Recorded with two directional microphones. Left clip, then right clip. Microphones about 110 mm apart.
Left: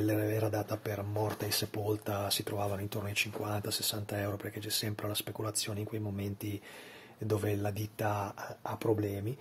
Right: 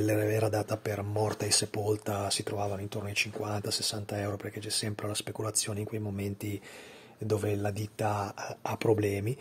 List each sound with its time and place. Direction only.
0.0 s speech: 50° right (ahead or behind); by 6.6 s 30° right (ahead or behind)
7.2 s speech: 20° right (ahead or behind)
8.6 s speech: 85° right